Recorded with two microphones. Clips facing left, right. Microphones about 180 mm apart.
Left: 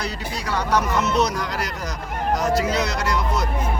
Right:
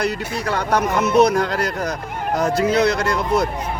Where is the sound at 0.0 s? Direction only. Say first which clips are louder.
Right 6 dB; 55° right (ahead or behind).